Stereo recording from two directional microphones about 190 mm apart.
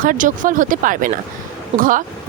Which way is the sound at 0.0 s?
45° right (ahead or behind).